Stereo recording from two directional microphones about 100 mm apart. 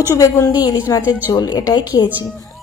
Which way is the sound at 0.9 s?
35° left (ahead or behind).